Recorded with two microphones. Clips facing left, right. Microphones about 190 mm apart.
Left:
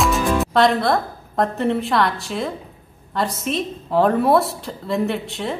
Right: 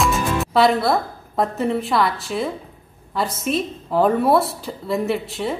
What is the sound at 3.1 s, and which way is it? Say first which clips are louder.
A woman's voice: right 1 dB; centre (ahead or behind).